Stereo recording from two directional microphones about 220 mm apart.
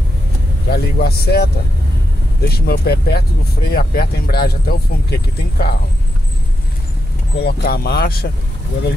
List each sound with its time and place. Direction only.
0.7 s speech: 45° left (ahead or behind)
7.3 s speech: 45° left (ahead or behind)